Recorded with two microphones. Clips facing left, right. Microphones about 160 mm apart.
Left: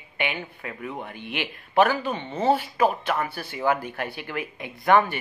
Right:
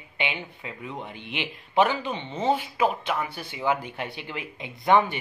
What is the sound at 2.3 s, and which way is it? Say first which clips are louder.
Speech: left 3 dB; 10° left (ahead or behind).